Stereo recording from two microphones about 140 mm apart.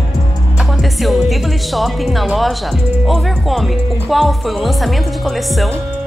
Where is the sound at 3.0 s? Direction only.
Centre (ahead or behind).